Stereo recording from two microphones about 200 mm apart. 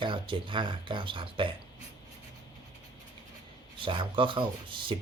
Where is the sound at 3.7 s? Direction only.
25° right (ahead or behind).